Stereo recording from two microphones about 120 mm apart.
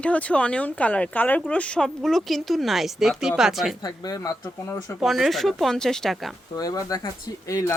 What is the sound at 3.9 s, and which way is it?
Speech, 30° left (ahead or behind).